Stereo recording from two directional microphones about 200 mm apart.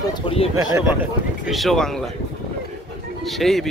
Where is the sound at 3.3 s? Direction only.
Centre (ahead or behind).